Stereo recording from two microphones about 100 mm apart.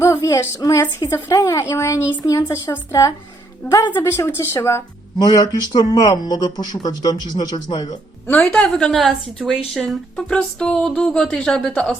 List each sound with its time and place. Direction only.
0.0 s a woman's voice: 30° left (ahead or behind)
3.8 s speech: 20° left (ahead or behind)
5.2 s a woman's voice: 40° left (ahead or behind)
8.4 s speech: 5° left (ahead or behind)